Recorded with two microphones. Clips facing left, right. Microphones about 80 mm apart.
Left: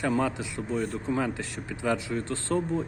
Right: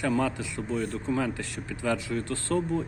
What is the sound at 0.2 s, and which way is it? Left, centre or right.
Speech, left.